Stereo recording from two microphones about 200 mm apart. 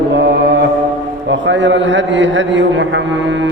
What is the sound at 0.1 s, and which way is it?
Mantra, 60° right (ahead or behind).